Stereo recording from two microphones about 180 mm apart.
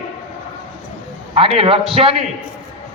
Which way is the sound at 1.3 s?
30° right (ahead or behind).